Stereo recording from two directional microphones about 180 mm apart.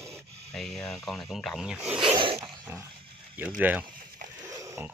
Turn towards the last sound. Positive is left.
turn(degrees=-15)  # may be behind; listen again after turning